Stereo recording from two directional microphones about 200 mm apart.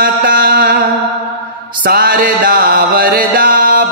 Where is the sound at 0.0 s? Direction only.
50° right (ahead or behind).